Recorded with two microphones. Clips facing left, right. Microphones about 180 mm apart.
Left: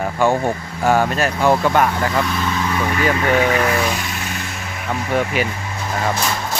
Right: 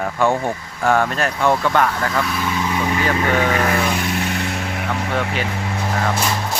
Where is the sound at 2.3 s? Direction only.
10° right (ahead or behind).